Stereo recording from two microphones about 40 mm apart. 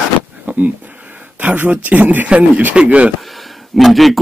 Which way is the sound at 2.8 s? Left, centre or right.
Right.